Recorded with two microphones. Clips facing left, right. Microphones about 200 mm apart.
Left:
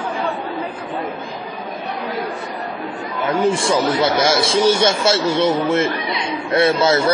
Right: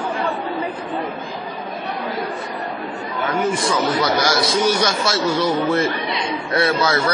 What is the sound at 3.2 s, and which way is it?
A man's voice, 30° left (ahead or behind).